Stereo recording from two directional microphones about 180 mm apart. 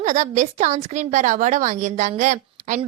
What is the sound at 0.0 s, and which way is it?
A woman's voice, 40° right (ahead or behind).